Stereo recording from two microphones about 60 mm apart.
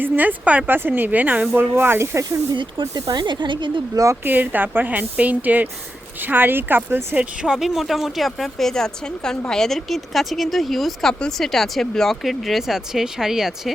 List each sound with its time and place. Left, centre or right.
0.0 s speech: right
1.7 s speech: right
2.1 s speech: right
4.2 s speech: right
7.4 s speech: centre